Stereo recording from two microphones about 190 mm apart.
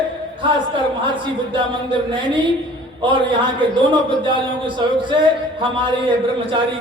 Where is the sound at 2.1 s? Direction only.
25° right (ahead or behind).